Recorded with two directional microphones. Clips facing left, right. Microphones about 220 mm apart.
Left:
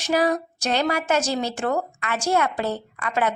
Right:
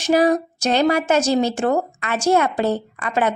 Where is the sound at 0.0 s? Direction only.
20° right (ahead or behind).